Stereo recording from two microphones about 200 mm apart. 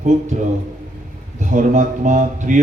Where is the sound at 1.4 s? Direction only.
40° right (ahead or behind).